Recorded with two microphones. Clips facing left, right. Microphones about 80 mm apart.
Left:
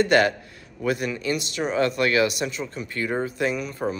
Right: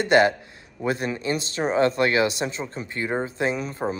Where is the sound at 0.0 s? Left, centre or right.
Right.